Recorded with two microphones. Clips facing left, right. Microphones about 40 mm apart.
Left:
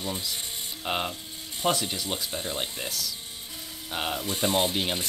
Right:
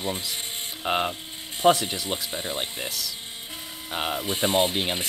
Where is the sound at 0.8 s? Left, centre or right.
Centre.